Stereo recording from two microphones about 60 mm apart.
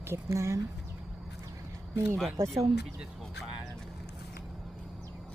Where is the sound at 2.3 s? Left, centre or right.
Right.